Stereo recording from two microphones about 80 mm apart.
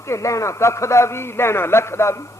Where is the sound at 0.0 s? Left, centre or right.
Left.